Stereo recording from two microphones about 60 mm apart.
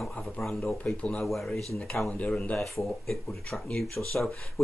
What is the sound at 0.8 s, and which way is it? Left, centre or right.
Speech, centre.